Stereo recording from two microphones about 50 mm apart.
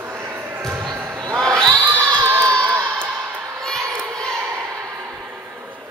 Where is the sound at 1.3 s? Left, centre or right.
Centre.